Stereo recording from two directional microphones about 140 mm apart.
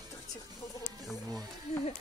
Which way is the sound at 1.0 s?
Centre (ahead or behind).